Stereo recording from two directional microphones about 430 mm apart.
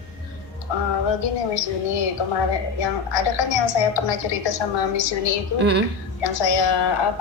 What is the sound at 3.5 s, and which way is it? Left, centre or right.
A woman's voice, left.